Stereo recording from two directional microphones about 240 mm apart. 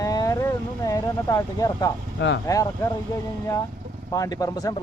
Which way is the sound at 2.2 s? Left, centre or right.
Left.